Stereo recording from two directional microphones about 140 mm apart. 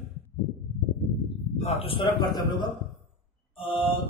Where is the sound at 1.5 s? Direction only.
45° left (ahead or behind).